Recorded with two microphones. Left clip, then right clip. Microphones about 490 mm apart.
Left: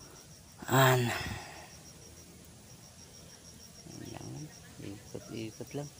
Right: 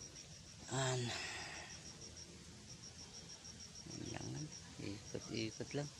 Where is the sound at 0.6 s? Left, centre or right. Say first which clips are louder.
Left 15 dB; right.